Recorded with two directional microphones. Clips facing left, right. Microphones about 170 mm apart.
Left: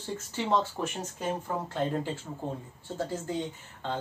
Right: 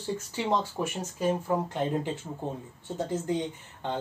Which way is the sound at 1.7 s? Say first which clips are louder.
Right 1 dB; 20° right (ahead or behind).